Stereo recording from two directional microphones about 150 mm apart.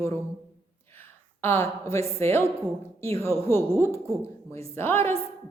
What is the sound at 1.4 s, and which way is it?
A woman's voice, 15° left (ahead or behind).